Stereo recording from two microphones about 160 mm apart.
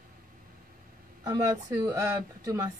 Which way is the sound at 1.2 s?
25° right (ahead or behind).